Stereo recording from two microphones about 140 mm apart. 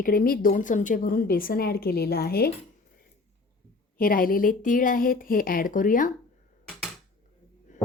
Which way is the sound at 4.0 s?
90° left.